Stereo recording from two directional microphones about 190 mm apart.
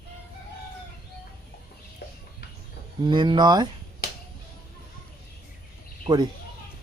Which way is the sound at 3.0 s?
25° right (ahead or behind).